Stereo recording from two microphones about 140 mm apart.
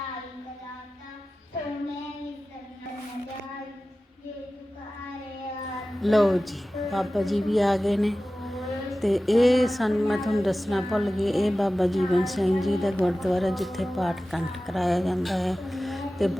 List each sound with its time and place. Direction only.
6.0 s a woman's voice: centre (ahead or behind)